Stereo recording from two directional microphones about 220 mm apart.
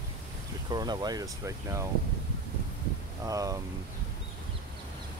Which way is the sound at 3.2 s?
15° right (ahead or behind).